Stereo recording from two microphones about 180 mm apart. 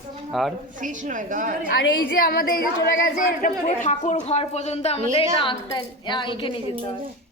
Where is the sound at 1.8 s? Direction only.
70° left (ahead or behind); by 6.5 s 25° left (ahead or behind).